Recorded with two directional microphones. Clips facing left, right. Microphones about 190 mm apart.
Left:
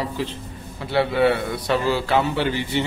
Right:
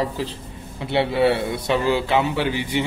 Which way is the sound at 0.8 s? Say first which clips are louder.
Even; 25° right (ahead or behind).